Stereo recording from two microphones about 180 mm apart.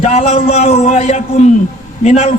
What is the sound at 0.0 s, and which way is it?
A man's voice, 35° left (ahead or behind).